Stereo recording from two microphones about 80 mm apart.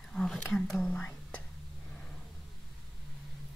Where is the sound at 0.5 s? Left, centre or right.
Centre.